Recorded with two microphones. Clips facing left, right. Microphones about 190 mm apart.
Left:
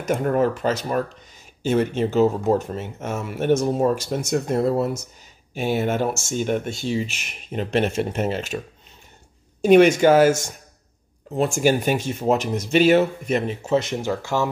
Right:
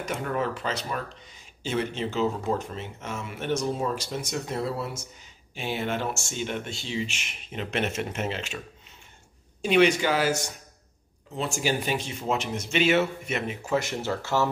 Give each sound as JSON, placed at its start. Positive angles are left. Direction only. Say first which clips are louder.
{"t": 0.0, "sound": "speech", "louder": "left 9 dB", "side_deg": 45}
{"t": 9.6, "sound": "speech", "louder": "left 8 dB", "side_deg": 45}